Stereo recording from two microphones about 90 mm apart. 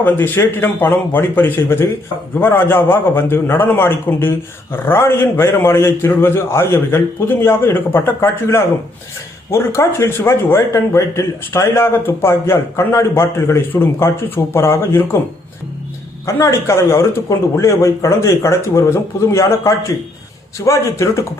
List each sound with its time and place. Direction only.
0.0 s a man's voice: 25° left (ahead or behind)
16.2 s speech: 30° left (ahead or behind)